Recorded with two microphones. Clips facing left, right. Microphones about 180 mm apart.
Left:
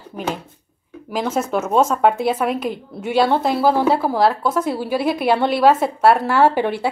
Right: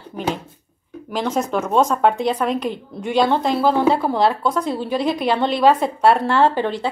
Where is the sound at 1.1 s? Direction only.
5° left (ahead or behind).